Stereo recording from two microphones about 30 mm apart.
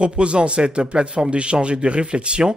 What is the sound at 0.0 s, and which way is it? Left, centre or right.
Speech, right.